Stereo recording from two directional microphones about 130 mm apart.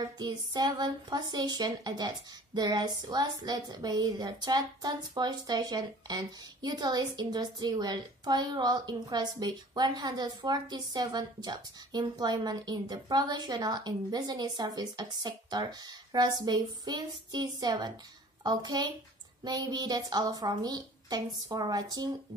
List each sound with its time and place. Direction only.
0.2 s speech: 30° right (ahead or behind)